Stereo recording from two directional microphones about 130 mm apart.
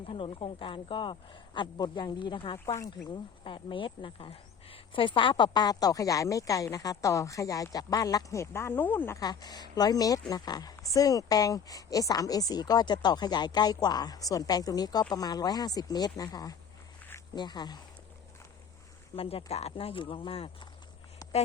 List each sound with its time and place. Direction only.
0.0 s speech: 45° left (ahead or behind)
2.7 s speech: 20° left (ahead or behind)
3.1 s speech: 40° left (ahead or behind); by 9.2 s 15° left (ahead or behind)
9.2 s speech: 30° left (ahead or behind)
19.1 s speech: 45° left (ahead or behind)